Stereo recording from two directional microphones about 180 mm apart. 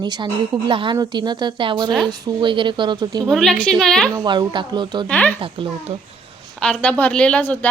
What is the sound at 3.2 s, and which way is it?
Speech, centre (ahead or behind).